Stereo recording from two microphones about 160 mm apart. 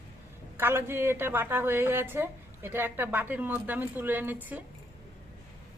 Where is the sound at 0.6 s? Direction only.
15° right (ahead or behind).